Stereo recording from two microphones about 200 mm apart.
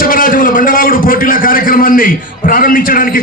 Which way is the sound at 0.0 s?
45° left (ahead or behind).